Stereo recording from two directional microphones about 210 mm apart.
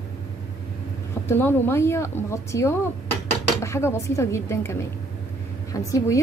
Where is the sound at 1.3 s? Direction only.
10° left (ahead or behind).